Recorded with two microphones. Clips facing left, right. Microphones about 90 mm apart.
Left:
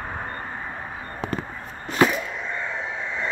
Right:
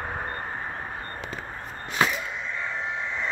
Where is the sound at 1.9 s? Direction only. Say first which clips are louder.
Left 5 dB; centre (ahead or behind).